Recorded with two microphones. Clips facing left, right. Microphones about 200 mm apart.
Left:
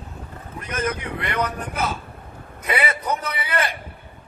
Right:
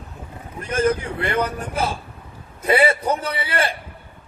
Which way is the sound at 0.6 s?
30° right (ahead or behind).